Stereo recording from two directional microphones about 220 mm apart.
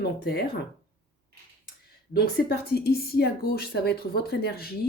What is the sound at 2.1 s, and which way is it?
Speech, 45° left (ahead or behind).